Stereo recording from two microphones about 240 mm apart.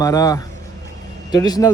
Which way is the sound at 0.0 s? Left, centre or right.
Centre.